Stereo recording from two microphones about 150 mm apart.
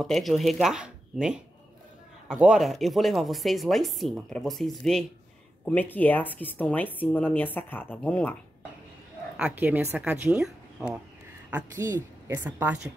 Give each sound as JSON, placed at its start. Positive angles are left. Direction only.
{"t": 0.0, "sound": "speech", "side_deg": 0}
{"t": 9.4, "sound": "speech", "side_deg": -10}
{"t": 11.8, "sound": "speech", "side_deg": -25}
{"t": 12.4, "sound": "speech", "side_deg": -10}